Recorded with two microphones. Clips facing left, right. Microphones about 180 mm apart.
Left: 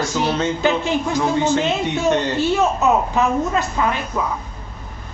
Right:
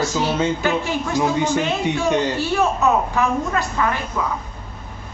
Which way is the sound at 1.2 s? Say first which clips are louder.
Right 1 dB; 15° right (ahead or behind).